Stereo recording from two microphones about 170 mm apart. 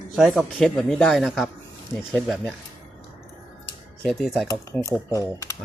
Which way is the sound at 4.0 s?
Centre (ahead or behind).